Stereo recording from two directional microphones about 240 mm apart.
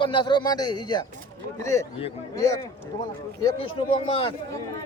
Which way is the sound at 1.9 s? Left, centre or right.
Left.